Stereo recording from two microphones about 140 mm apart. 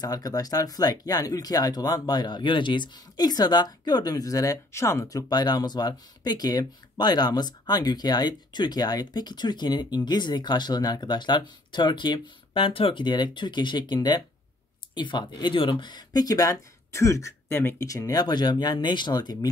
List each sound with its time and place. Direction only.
0.0 s speech: 25° left (ahead or behind)